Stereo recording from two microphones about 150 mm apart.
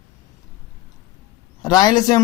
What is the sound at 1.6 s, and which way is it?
Speech, 25° left (ahead or behind).